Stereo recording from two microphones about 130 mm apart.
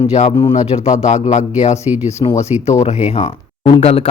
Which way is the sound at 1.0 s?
60° left (ahead or behind).